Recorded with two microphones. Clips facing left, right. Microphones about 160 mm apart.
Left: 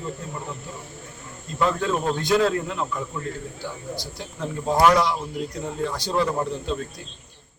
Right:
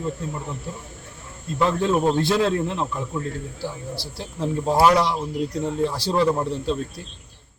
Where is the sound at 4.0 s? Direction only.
30° right (ahead or behind).